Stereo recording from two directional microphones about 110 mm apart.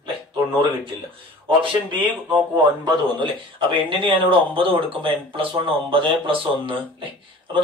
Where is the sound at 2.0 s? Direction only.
15° right (ahead or behind).